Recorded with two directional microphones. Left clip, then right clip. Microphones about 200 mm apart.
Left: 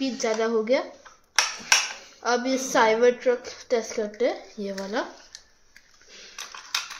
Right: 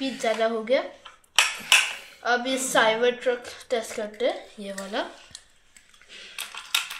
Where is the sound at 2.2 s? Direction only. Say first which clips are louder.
Even; 45° left (ahead or behind).